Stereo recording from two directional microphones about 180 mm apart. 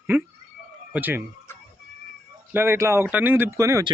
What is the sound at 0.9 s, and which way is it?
Speech, 10° right (ahead or behind).